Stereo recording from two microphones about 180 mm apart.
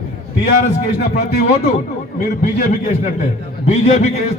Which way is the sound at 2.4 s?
45° left (ahead or behind).